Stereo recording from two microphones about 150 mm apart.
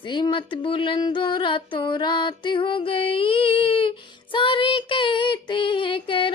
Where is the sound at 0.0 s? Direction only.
30° left (ahead or behind).